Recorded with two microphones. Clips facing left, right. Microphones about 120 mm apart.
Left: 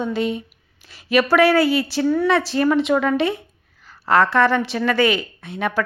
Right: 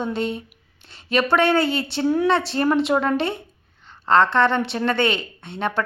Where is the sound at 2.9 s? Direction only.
35° right (ahead or behind).